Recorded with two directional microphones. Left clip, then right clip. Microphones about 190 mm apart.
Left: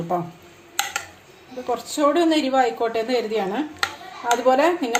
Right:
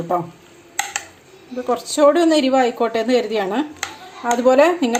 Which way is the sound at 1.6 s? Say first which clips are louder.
Right 6 dB; 40° right (ahead or behind).